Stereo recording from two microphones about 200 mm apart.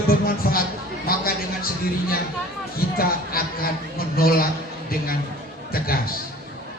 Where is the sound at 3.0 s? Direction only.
50° left (ahead or behind).